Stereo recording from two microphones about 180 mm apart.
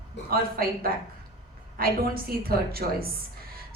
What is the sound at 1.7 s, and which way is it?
A woman's voice, 55° right (ahead or behind).